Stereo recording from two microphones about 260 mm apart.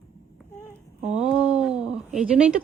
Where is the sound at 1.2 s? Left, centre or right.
Centre.